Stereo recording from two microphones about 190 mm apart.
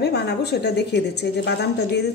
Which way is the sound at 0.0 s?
60° left (ahead or behind).